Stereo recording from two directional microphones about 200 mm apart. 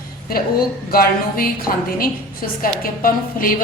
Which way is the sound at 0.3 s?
50° left (ahead or behind).